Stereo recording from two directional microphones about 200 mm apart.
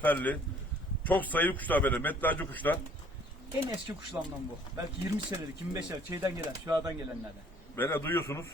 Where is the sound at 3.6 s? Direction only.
20° right (ahead or behind).